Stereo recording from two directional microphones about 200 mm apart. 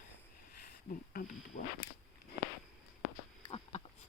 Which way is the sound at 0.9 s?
40° left (ahead or behind).